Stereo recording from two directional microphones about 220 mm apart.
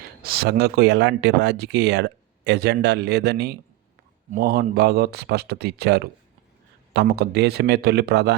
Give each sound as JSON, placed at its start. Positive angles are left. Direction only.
{"t": 0.2, "sound": "speech", "side_deg": -45}